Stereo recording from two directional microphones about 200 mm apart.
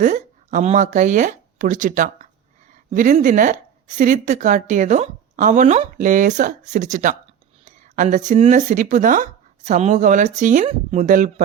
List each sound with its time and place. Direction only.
0.0 s a woman's voice: 40° right (ahead or behind)